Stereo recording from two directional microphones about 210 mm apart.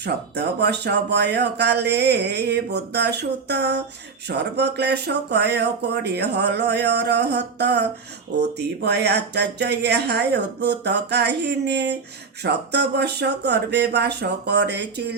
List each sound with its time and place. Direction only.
0.0 s speech: 50° right (ahead or behind)